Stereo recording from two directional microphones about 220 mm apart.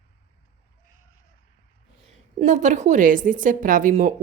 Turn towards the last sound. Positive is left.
turn(degrees=-35)  # may be behind; listen again after turning